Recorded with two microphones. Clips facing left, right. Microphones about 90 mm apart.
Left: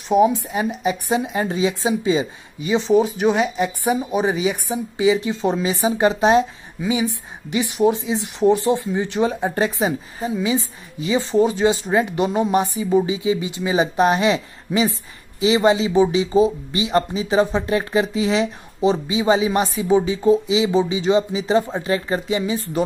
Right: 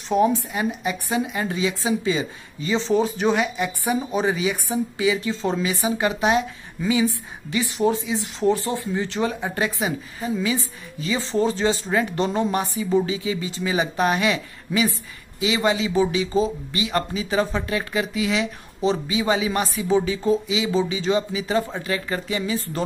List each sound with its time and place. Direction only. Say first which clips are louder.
0.1 s a woman's voice: left 3 dB; 10° left (ahead or behind)
0.5 s speech: left 3 dB; 25° left (ahead or behind); by 3.3 s 10° left (ahead or behind)
3.3 s speech: left 3 dB; 25° left (ahead or behind)
6.9 s a woman's voice: even; 20° left (ahead or behind)
18.8 s speech: left 3 dB; 20° left (ahead or behind)